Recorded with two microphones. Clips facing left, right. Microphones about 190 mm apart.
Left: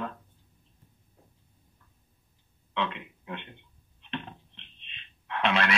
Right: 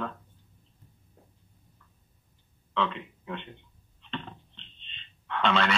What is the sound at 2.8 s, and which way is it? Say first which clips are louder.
Speech: right 2 dB; 5° left (ahead or behind).